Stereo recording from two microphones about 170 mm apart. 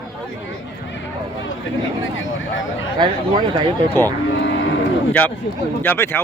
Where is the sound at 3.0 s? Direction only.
25° right (ahead or behind).